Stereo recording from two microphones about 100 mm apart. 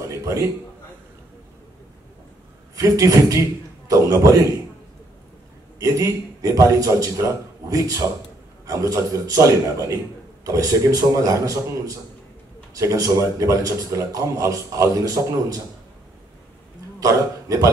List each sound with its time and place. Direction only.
0.0 s a sound: 30° right (ahead or behind)
2.7 s a man's voice: 35° right (ahead or behind)
5.8 s a man's voice: 30° right (ahead or behind)
17.0 s a man's voice: 30° right (ahead or behind)